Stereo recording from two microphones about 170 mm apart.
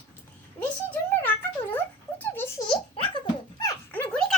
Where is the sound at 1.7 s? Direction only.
10° left (ahead or behind).